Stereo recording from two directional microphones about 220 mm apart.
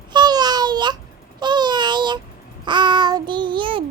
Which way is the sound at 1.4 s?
20° right (ahead or behind).